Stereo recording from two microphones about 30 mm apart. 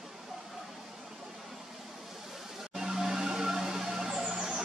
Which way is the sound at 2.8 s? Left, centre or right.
Centre.